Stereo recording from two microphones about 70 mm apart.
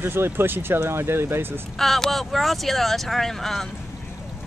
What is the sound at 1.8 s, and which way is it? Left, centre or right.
Speech, centre.